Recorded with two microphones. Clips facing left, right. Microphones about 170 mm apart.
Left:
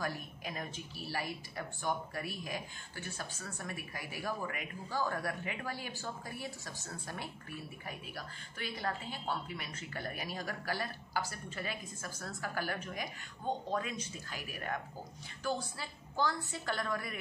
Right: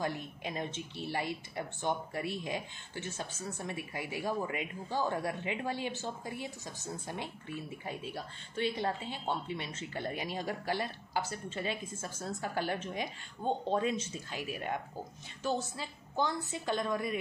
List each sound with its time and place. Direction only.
0.0 s speech: 25° right (ahead or behind)